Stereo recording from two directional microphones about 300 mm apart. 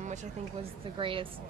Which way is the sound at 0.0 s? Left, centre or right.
Right.